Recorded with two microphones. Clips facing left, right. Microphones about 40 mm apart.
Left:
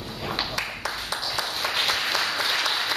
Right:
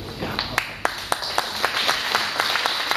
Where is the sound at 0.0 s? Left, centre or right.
Centre.